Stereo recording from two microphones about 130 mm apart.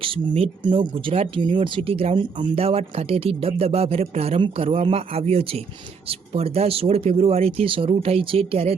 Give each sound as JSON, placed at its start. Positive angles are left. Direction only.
{"t": 0.0, "sound": "speech", "side_deg": -45}